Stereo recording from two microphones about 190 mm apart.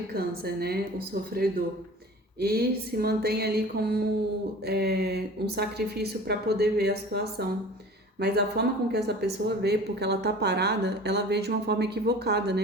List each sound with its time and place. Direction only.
0.1 s speech: 55° right (ahead or behind)